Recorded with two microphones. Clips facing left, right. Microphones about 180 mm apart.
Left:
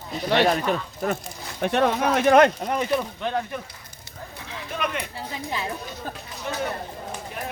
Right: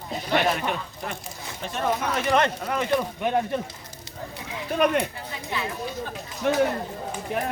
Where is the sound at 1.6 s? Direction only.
70° left (ahead or behind).